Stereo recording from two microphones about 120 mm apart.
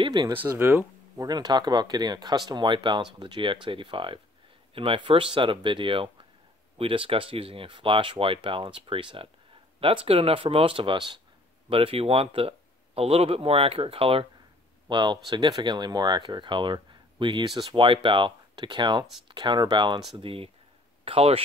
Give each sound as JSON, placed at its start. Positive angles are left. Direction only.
{"t": 0.0, "sound": "speech", "side_deg": -40}
{"t": 0.4, "sound": "speech", "side_deg": -20}
{"t": 1.2, "sound": "speech", "side_deg": -35}
{"t": 14.9, "sound": "speech", "side_deg": -40}
{"t": 17.8, "sound": "speech", "side_deg": -45}
{"t": 20.2, "sound": "speech", "side_deg": -50}